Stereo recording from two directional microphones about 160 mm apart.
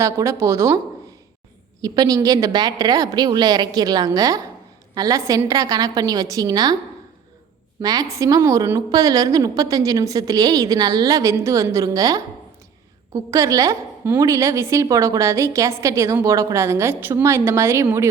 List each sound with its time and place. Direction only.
0.0 s a woman's voice: 20° right (ahead or behind)
1.8 s a woman's voice: 25° right (ahead or behind)
7.8 s a woman's voice: 25° right (ahead or behind)